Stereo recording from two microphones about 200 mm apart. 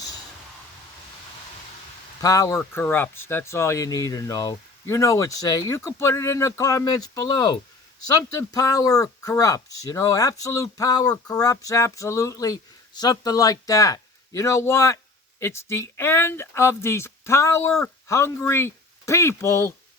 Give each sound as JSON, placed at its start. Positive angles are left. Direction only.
{"t": 2.2, "sound": "speech", "side_deg": 15}